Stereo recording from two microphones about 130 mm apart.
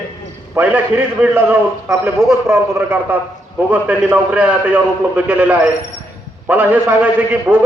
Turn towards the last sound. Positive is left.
turn(degrees=-15)  # may be behind; listen again after turning